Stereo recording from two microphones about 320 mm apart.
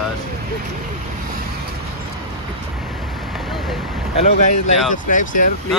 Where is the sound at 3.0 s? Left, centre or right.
Centre.